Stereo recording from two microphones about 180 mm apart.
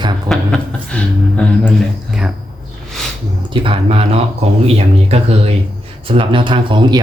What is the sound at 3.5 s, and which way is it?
Speech, 30° right (ahead or behind).